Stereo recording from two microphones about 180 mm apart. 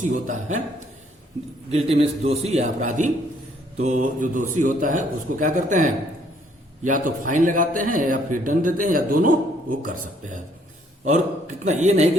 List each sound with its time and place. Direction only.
0.0 s a man's voice: 45° right (ahead or behind)
1.7 s a man's voice: 35° right (ahead or behind)